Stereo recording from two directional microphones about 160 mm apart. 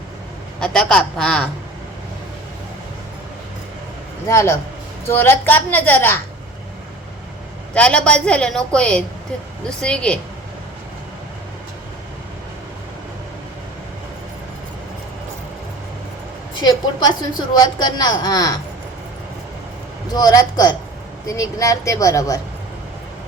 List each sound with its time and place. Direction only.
0.6 s a woman's voice: 5° left (ahead or behind)
4.3 s a woman's voice: 20° left (ahead or behind)
7.7 s a woman's voice: 5° left (ahead or behind)
16.6 s a woman's voice: 25° left (ahead or behind)
20.1 s a woman's voice: 25° left (ahead or behind)